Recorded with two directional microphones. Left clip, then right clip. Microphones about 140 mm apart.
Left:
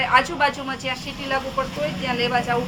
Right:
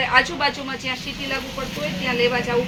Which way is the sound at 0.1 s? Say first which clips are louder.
Left 2 dB; 25° left (ahead or behind).